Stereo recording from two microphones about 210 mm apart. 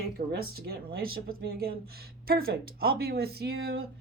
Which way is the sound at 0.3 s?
50° right (ahead or behind).